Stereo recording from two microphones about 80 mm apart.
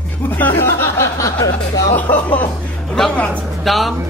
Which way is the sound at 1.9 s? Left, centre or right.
Centre.